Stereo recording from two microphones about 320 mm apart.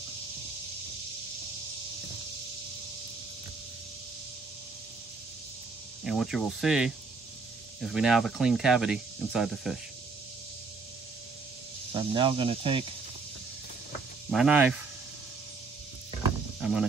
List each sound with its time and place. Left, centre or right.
6.0 s speech: centre
11.9 s speech: centre
14.3 s speech: centre